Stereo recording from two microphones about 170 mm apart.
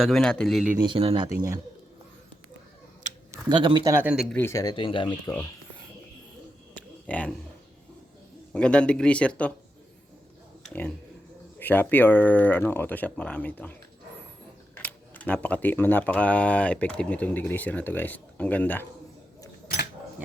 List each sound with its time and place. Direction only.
0.0 s speech: 5° left (ahead or behind)
0.8 s speech: 30° right (ahead or behind)
3.5 s speech: 30° right (ahead or behind); by 4.4 s 5° right (ahead or behind)
4.4 s speech: 15° left (ahead or behind)
6.7 s a sound: 10° left (ahead or behind)
8.5 s speech: 5° left (ahead or behind)
10.6 s a sound: 5° left (ahead or behind)
11.6 s speech: 10° left (ahead or behind)
14.8 s speech: 10° left (ahead or behind)